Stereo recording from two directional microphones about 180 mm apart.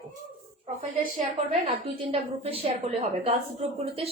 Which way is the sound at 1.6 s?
35° right (ahead or behind).